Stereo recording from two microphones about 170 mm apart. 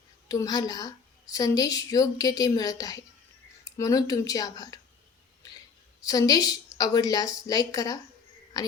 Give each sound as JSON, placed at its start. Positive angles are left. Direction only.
{"t": 0.3, "sound": "a woman's voice", "side_deg": 20}
{"t": 6.0, "sound": "a woman's voice", "side_deg": 20}